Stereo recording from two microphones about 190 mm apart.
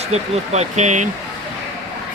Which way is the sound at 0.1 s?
35° right (ahead or behind).